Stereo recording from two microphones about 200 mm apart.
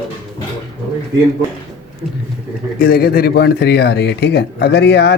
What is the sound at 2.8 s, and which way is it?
Speech, 50° left (ahead or behind).